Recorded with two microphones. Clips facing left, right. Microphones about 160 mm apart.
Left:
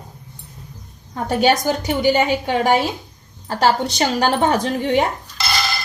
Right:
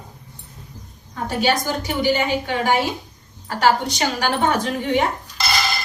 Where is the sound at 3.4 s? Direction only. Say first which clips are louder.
Left 1 dB; 30° left (ahead or behind).